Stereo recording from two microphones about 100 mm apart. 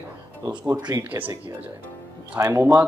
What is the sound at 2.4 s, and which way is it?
Speech, 30° right (ahead or behind).